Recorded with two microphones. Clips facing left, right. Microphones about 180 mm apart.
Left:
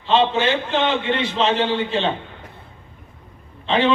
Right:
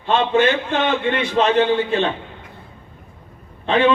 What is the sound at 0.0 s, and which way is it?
A man's voice, 55° right (ahead or behind).